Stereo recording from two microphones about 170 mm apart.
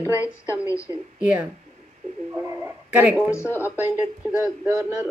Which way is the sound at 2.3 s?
15° right (ahead or behind).